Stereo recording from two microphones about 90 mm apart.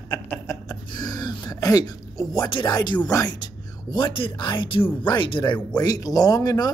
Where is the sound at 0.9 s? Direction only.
50° left (ahead or behind).